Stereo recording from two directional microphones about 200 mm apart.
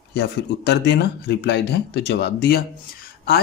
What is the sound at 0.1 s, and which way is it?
Speech, 55° left (ahead or behind).